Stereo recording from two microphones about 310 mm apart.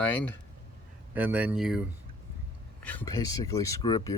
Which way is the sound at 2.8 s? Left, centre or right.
Centre.